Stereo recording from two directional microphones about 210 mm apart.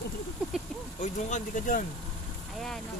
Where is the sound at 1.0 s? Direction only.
35° left (ahead or behind).